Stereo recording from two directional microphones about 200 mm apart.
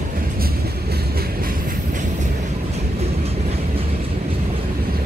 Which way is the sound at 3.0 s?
30° right (ahead or behind).